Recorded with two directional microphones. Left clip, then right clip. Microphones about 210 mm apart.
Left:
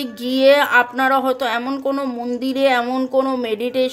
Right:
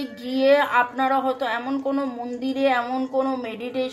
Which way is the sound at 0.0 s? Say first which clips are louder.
Left 6 dB; 50° left (ahead or behind).